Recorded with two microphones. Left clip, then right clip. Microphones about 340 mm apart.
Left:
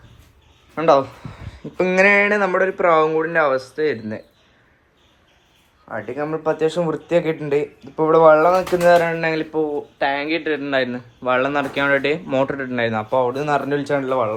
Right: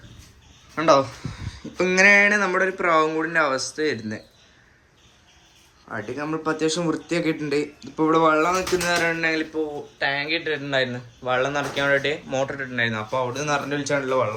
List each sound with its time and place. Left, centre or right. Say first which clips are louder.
0.8 s speech: left 2 dB; centre
5.9 s speech: left 4 dB; centre